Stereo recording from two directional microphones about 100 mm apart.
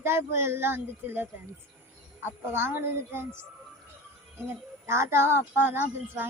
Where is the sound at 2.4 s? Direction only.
25° right (ahead or behind).